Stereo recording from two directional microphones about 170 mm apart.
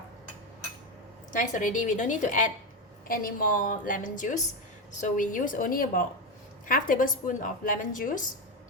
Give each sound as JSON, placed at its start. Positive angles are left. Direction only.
{"t": 1.3, "sound": "a woman's voice", "side_deg": 50}